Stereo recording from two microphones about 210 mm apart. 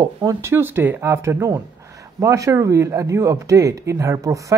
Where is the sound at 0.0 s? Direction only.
20° right (ahead or behind).